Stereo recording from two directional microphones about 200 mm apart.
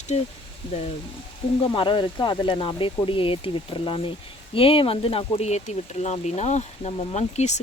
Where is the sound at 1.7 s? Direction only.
25° left (ahead or behind).